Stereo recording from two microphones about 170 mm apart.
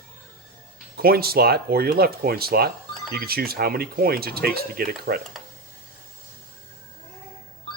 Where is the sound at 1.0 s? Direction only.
60° right (ahead or behind).